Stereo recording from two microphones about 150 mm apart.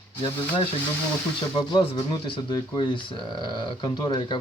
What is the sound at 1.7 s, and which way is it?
Speech, 30° left (ahead or behind).